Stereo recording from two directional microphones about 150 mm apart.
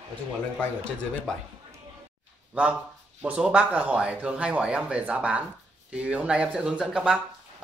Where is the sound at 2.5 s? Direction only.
10° right (ahead or behind).